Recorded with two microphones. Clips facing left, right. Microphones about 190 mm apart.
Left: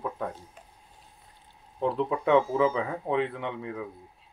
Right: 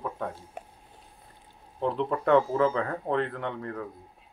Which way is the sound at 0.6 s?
65° right (ahead or behind).